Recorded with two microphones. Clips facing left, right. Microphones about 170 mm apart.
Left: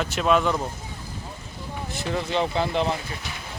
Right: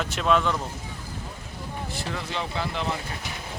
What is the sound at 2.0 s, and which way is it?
Speech, 20° left (ahead or behind).